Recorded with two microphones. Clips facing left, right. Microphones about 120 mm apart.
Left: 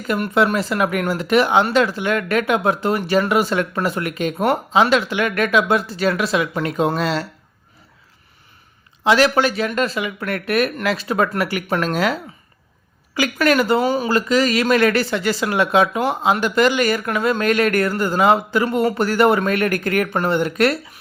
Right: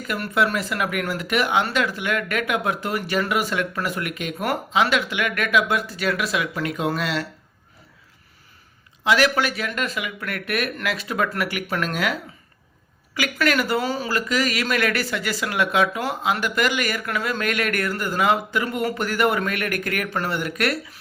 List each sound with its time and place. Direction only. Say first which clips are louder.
0.2 s speech: left 4 dB; 25° left (ahead or behind)
9.0 s speech: left 4 dB; 30° left (ahead or behind)
14.1 s speech: left 6 dB; 30° left (ahead or behind)